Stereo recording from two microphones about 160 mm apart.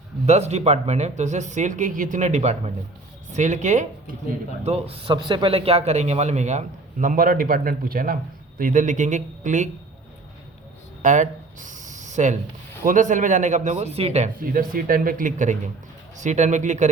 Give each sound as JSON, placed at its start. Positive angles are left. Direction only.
{"t": 0.3, "sound": "speech", "side_deg": -45}
{"t": 4.6, "sound": "speech", "side_deg": -40}
{"t": 11.0, "sound": "a sound", "side_deg": -50}
{"t": 12.8, "sound": "speech", "side_deg": -55}
{"t": 14.5, "sound": "speech", "side_deg": -60}